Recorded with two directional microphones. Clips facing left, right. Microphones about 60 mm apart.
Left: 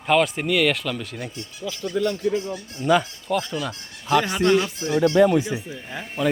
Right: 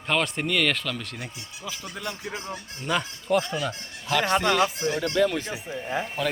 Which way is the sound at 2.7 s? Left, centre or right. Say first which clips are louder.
Left 8 dB; centre.